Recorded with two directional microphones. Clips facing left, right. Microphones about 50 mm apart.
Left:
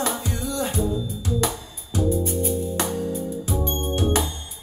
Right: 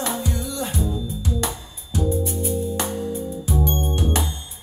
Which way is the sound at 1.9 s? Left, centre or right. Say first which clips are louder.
Left 1 dB; left.